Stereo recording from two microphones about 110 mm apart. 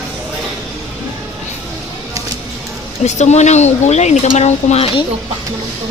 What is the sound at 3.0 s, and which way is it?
Speech, 90° left.